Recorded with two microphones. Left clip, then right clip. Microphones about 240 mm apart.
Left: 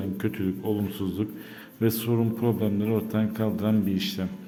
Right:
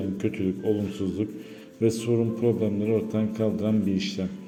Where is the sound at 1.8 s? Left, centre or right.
Centre.